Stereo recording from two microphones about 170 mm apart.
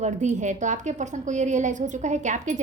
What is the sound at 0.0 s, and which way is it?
A woman's voice, 45° right (ahead or behind).